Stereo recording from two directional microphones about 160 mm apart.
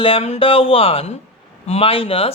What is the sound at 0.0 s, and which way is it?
Speech, 35° left (ahead or behind).